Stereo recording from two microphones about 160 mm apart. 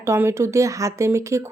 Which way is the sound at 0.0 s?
15° right (ahead or behind).